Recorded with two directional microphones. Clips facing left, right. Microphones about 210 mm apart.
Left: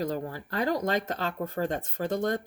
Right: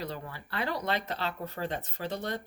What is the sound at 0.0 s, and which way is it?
Speech, 45° left (ahead or behind).